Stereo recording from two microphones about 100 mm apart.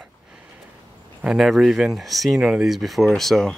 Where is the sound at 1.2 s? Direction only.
Centre (ahead or behind).